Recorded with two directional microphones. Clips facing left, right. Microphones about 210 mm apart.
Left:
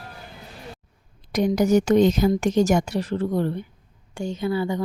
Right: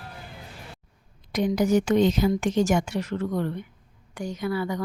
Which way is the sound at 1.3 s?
45° left (ahead or behind).